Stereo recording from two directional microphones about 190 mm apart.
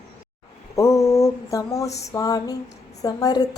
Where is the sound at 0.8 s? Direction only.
15° left (ahead or behind).